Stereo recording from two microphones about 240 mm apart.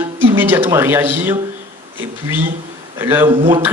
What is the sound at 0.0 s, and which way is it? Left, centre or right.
Speech, centre.